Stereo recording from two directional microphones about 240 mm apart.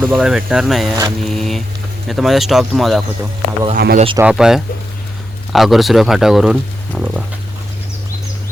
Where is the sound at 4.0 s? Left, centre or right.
Right.